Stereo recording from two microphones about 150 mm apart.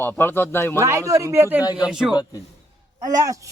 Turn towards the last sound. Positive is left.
turn(degrees=-20)  # may be behind; listen again after turning